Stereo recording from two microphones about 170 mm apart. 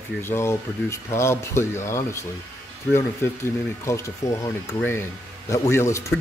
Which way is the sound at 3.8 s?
15° left (ahead or behind).